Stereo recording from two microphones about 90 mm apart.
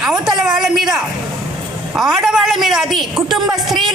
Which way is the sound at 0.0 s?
5° right (ahead or behind).